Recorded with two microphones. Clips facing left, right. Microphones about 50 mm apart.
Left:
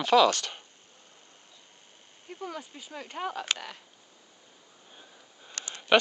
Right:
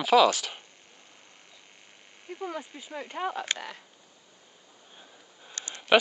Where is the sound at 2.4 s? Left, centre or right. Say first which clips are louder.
Right 3 dB; right.